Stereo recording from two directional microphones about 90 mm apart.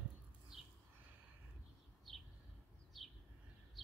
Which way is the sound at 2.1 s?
5° left (ahead or behind).